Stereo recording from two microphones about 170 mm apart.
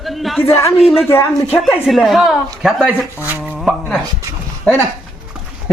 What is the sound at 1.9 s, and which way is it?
A woman's voice, centre (ahead or behind).